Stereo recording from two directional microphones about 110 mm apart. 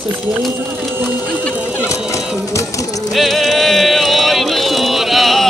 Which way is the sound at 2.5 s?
30° left (ahead or behind).